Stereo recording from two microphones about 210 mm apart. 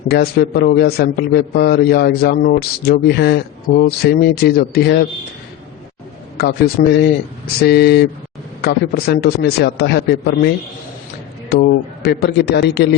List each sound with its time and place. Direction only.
0.1 s a man's voice: 50° left (ahead or behind)
6.3 s a man's voice: 50° left (ahead or behind)
11.6 s a man's voice: 55° left (ahead or behind)